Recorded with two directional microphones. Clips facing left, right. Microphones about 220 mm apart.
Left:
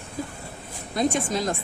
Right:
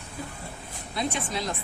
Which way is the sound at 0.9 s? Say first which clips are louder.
Left 6 dB; 45° left (ahead or behind).